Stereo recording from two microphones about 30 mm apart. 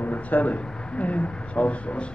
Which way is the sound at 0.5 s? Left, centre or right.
Left.